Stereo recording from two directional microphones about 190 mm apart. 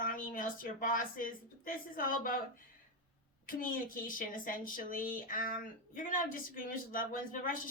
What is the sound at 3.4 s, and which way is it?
Speech, 45° left (ahead or behind).